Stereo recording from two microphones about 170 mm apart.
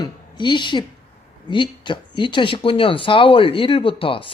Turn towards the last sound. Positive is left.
turn(degrees=30)  # may be behind; listen again after turning